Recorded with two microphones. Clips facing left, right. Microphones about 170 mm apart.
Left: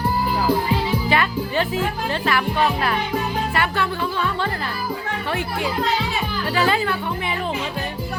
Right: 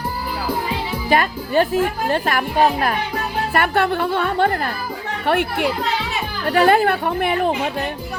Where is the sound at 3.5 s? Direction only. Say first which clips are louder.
Right 8 dB; 55° right (ahead or behind).